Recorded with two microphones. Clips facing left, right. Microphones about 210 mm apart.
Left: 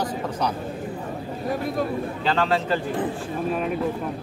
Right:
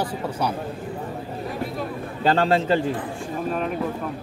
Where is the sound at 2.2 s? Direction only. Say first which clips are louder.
Right 5 dB; 40° right (ahead or behind).